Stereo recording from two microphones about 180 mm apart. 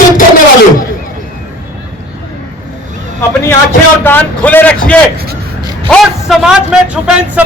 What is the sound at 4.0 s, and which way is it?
A man's voice, 10° left (ahead or behind).